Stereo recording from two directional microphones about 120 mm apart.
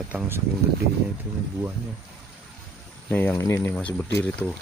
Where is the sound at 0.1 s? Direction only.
10° right (ahead or behind).